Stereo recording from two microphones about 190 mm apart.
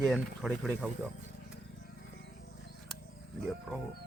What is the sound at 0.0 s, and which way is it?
Speech, centre (ahead or behind).